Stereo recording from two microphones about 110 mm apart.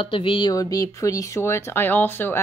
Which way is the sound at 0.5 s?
30° left (ahead or behind).